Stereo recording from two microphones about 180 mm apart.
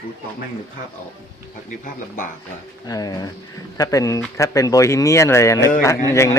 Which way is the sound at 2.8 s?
20° left (ahead or behind).